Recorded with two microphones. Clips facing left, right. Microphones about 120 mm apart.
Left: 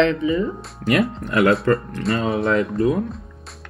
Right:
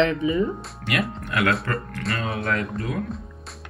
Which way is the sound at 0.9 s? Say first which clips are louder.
Left 7 dB; 30° left (ahead or behind).